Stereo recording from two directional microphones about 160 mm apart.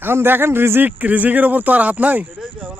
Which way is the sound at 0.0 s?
15° right (ahead or behind).